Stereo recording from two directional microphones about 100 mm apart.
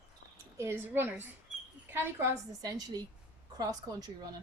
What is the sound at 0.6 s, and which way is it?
A woman's voice, 25° right (ahead or behind).